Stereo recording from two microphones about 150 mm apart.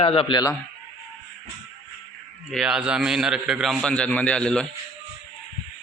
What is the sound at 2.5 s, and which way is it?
A man's voice, 5° right (ahead or behind).